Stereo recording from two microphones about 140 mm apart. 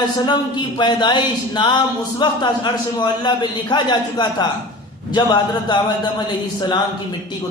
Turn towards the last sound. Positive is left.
turn(degrees=30)  # may be behind; listen again after turning